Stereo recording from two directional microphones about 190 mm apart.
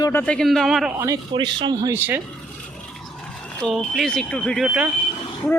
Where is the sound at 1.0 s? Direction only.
20° right (ahead or behind).